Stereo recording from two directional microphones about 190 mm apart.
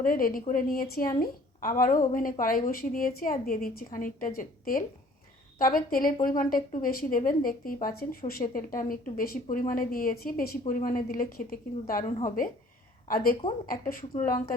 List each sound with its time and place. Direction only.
0.0 s a woman's voice: 50° left (ahead or behind)